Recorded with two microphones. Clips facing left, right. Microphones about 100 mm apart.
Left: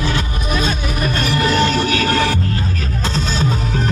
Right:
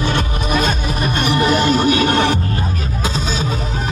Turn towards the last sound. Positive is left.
turn(degrees=-10)  # may be behind; listen again after turning